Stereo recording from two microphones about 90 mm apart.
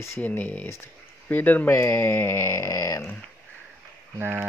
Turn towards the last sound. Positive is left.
turn(degrees=-25)  # may be behind; listen again after turning